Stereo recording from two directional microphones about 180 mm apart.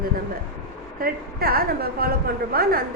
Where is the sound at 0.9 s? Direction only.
55° right (ahead or behind).